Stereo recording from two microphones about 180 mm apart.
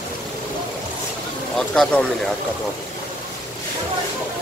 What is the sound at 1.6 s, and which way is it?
Speech, 5° left (ahead or behind).